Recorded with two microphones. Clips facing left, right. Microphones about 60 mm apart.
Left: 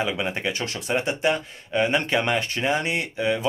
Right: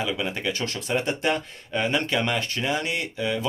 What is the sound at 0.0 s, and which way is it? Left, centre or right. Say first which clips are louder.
Speech: left 2 dB; left.